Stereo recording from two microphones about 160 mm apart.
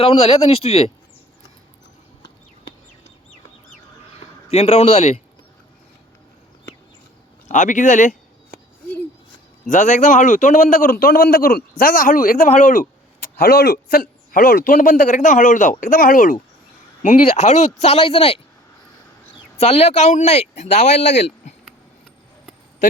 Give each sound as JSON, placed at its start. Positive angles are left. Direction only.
{"t": 0.0, "sound": "speech", "side_deg": 35}
{"t": 4.4, "sound": "speech", "side_deg": 40}
{"t": 7.4, "sound": "speech", "side_deg": 50}
{"t": 9.6, "sound": "a man's voice", "side_deg": 50}
{"t": 13.3, "sound": "a man's voice", "side_deg": 70}
{"t": 17.0, "sound": "speech", "side_deg": 50}
{"t": 19.5, "sound": "speech", "side_deg": 40}